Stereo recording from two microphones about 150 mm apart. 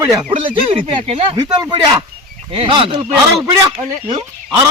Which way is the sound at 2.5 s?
35° right (ahead or behind).